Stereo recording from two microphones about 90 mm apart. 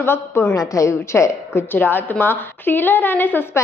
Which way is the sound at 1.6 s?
20° left (ahead or behind).